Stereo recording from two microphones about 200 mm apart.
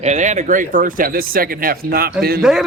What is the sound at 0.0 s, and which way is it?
Speech, 35° right (ahead or behind).